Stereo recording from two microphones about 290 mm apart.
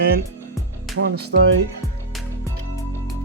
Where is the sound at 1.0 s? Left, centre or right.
Right.